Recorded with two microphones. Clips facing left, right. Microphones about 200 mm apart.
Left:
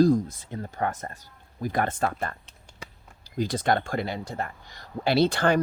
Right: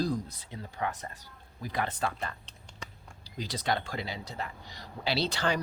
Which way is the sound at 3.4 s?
50° left (ahead or behind).